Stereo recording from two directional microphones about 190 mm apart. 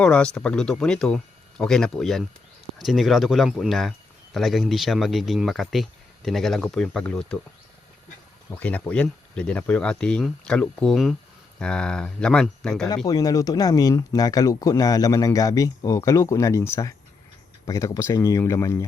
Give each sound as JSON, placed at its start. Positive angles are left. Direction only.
{"t": 0.0, "sound": "speech", "side_deg": 5}
{"t": 8.5, "sound": "speech", "side_deg": 5}
{"t": 13.1, "sound": "speech", "side_deg": 20}